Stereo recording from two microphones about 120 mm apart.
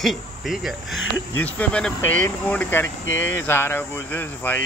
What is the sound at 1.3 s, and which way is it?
Speech, 15° left (ahead or behind).